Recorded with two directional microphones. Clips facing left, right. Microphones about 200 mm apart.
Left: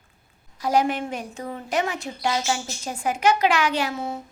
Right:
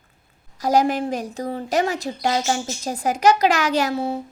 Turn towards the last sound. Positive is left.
turn(degrees=-35)  # may be behind; listen again after turning